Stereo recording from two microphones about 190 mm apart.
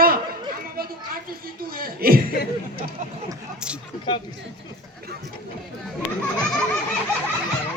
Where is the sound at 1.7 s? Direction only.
50° right (ahead or behind).